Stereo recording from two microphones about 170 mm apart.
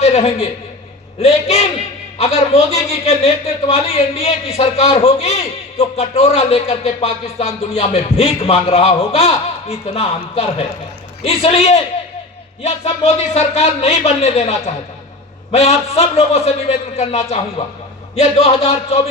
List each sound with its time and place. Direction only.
0.0 s a man's voice: 35° left (ahead or behind)
15.5 s a man's voice: 40° left (ahead or behind)